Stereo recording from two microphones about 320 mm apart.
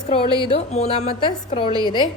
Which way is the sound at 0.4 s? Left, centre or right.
Centre.